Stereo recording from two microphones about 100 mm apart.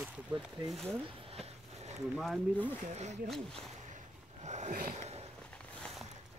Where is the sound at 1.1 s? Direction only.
70° right (ahead or behind); by 1.9 s 90° right.